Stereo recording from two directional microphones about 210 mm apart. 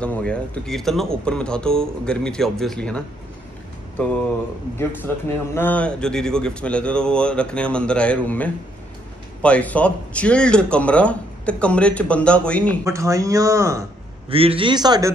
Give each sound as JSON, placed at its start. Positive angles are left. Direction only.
{"t": 0.0, "sound": "a man's voice", "side_deg": 5}
{"t": 4.7, "sound": "a man's voice", "side_deg": 10}
{"t": 12.8, "sound": "speech", "side_deg": -15}
{"t": 14.3, "sound": "a man's voice", "side_deg": -25}